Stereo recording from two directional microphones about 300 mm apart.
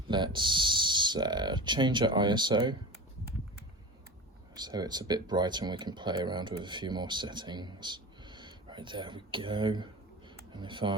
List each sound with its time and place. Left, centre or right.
0.1 s speech: centre
4.5 s speech: centre